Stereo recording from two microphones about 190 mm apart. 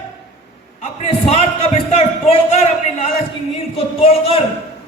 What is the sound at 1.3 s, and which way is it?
A man's voice, 35° left (ahead or behind).